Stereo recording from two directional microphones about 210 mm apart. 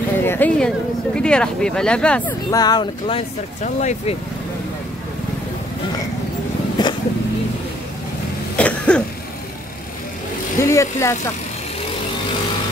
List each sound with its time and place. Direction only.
0.2 s speech: 10° left (ahead or behind)
2.5 s speech: 20° left (ahead or behind)
3.6 s speech: 35° left (ahead or behind)
6.8 s vehicle: 20° left (ahead or behind)
8.5 s cough: 5° left (ahead or behind)
10.6 s speech: 15° left (ahead or behind)